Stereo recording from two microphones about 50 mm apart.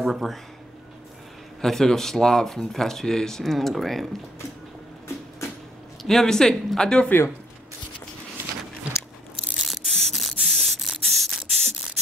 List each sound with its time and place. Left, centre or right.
0.0 s speech: centre
1.6 s speech: centre
6.0 s speech: centre
9.6 s spray: centre